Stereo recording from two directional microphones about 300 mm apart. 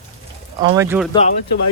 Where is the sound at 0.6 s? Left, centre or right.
Centre.